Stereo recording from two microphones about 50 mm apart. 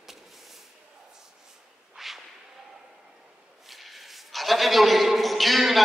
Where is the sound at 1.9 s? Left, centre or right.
Centre.